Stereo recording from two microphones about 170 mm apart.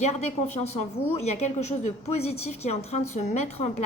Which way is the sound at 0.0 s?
40° left (ahead or behind).